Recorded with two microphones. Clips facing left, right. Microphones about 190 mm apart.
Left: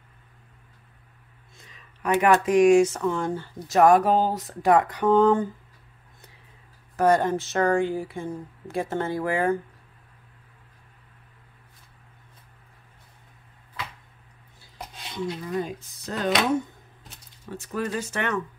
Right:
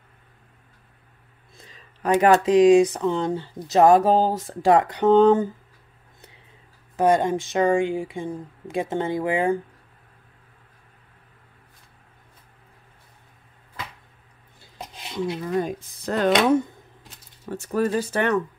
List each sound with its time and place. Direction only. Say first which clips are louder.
1.6 s a sound: right 3 dB; 30° right (ahead or behind)
2.3 s speech: right 2 dB; 20° right (ahead or behind)
7.0 s speech: right 1 dB; 15° right (ahead or behind)
14.8 s dishes: right 3 dB; 20° right (ahead or behind)
15.4 s speech: right 4 dB; 50° right (ahead or behind)
17.5 s speech: right 6 dB; 40° right (ahead or behind)